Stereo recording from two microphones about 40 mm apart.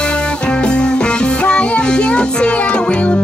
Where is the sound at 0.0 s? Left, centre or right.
Left.